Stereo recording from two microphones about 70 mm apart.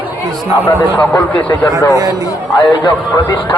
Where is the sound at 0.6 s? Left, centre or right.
Left.